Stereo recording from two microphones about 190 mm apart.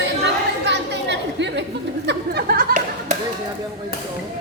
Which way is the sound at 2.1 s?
55° right (ahead or behind).